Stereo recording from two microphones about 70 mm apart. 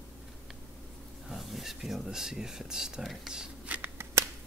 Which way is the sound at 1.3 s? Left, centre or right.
Centre.